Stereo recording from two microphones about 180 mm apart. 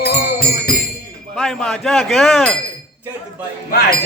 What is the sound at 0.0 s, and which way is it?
Music, 60° left (ahead or behind).